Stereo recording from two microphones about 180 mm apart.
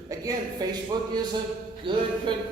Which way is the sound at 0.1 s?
20° right (ahead or behind).